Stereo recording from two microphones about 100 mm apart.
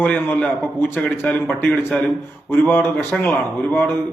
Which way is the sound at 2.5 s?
20° left (ahead or behind).